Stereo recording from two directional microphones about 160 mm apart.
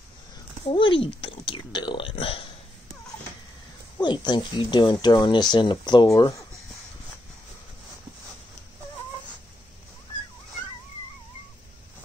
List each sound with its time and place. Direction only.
0.7 s speech: 30° left (ahead or behind)
4.0 s speech: 30° left (ahead or behind)